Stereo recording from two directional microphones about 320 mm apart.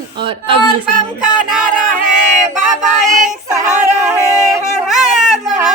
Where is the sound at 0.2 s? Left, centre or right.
Centre.